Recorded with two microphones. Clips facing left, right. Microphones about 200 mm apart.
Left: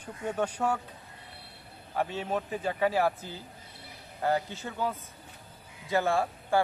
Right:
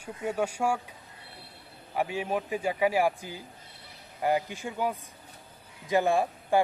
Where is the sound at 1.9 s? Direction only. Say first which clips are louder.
Right 1 dB; 10° right (ahead or behind).